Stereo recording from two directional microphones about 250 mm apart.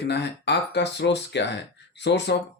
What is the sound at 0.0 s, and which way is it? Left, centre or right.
Speech, left.